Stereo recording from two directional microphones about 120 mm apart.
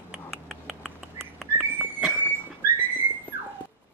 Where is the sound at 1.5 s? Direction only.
15° right (ahead or behind).